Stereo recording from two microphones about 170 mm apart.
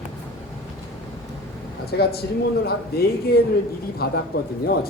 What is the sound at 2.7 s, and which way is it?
A man's voice, 65° left (ahead or behind).